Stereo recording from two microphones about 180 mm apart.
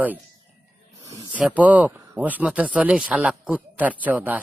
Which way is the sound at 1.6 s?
10° right (ahead or behind).